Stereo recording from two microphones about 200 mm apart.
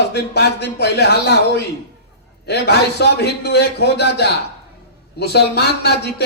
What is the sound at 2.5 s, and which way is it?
A man's voice, 55° left (ahead or behind).